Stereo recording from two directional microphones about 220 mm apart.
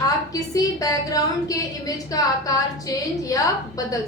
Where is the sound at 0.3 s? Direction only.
15° left (ahead or behind).